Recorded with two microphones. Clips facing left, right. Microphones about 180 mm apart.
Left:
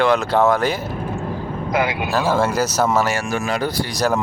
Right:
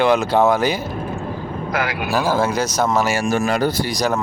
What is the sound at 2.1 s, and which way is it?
Speech, 5° right (ahead or behind).